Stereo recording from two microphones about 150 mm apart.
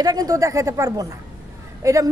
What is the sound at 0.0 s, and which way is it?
Speech, 25° right (ahead or behind).